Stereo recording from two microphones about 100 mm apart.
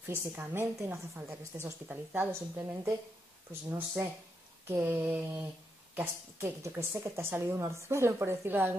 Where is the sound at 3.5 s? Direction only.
25° right (ahead or behind).